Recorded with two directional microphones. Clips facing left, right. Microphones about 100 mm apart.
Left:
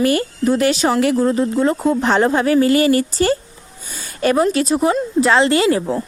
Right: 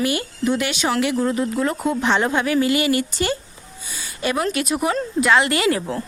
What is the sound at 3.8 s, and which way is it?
Speech, 50° left (ahead or behind).